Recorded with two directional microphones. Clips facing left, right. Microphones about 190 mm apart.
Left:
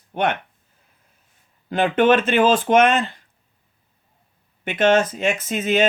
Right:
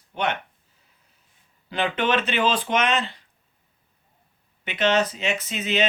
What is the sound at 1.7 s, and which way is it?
Speech, 50° left (ahead or behind).